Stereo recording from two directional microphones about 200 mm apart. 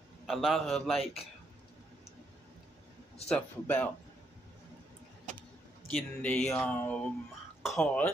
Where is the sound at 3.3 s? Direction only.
10° left (ahead or behind).